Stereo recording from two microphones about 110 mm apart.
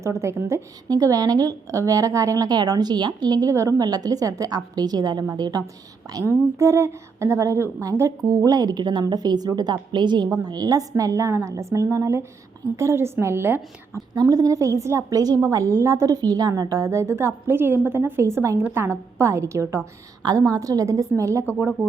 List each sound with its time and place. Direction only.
0.0 s a woman's voice: 25° right (ahead or behind)
14.2 s a woman's voice: 30° right (ahead or behind)